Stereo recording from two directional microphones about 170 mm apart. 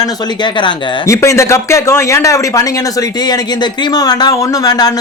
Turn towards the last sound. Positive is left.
turn(degrees=20)  # may be behind; listen again after turning